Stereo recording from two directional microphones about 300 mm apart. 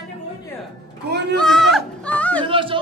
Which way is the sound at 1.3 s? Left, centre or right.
Centre.